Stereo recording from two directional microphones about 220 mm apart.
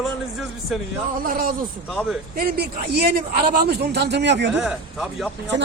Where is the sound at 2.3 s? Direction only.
45° right (ahead or behind).